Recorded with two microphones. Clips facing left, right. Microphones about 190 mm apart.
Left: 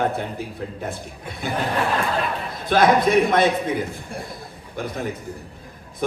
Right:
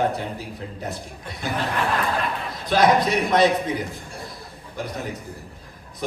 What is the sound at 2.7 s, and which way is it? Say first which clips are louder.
Speech: left 2 dB; 50° left (ahead or behind).